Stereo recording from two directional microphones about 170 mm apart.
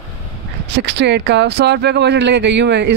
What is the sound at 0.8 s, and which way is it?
Speech, 90° right.